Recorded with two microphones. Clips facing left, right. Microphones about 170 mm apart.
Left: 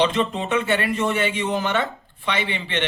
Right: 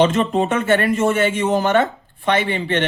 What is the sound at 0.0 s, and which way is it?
A man's voice, 45° right (ahead or behind).